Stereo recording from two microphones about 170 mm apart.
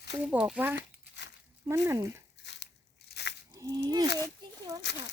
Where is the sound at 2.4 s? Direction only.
90° left.